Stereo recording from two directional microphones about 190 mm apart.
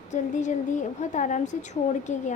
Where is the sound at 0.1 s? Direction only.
40° left (ahead or behind).